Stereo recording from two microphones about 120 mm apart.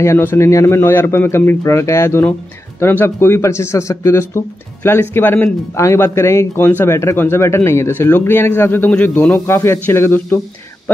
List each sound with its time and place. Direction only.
0.0 s speech: 20° left (ahead or behind)
9.5 s speech: 20° left (ahead or behind)